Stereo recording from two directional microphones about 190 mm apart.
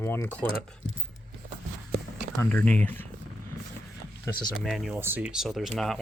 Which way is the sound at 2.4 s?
10° left (ahead or behind).